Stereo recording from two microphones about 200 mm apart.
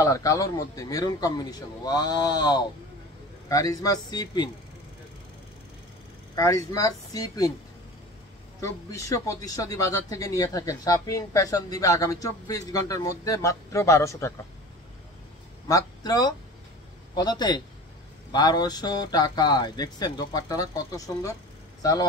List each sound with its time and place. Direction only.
0.0 s speech: 15° left (ahead or behind)
6.3 s speech: 15° left (ahead or behind)
8.5 s speech: 15° left (ahead or behind)
15.7 s speech: 20° left (ahead or behind)